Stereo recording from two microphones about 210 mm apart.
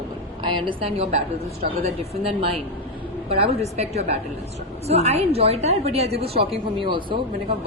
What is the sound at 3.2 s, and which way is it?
A woman's voice, 30° right (ahead or behind).